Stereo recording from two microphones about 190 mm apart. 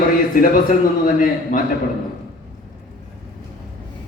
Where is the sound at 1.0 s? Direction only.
45° left (ahead or behind).